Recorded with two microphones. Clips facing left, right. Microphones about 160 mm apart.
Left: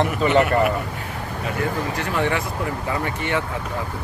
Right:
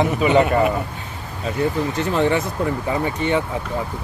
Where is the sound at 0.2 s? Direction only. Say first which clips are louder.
Right 1 dB; 15° right (ahead or behind).